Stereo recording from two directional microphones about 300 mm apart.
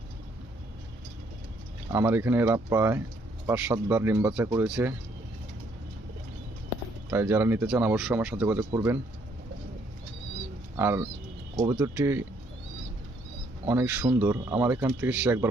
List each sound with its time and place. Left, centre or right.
1.9 s speech: centre
7.1 s speech: centre
10.8 s speech: centre
13.7 s speech: centre